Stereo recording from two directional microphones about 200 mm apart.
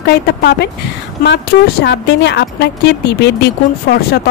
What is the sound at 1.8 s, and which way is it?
A woman's voice, 60° left (ahead or behind).